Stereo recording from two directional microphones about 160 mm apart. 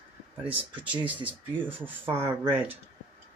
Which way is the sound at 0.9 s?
10° right (ahead or behind).